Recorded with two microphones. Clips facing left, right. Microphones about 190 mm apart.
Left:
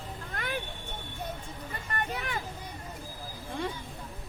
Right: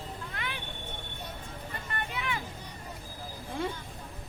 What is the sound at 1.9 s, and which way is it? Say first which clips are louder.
Vehicle: left 2 dB; 45° left (ahead or behind).